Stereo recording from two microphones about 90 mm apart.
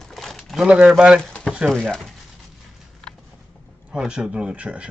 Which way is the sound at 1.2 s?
10° left (ahead or behind).